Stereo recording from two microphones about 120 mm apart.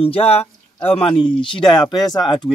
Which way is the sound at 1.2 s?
40° left (ahead or behind).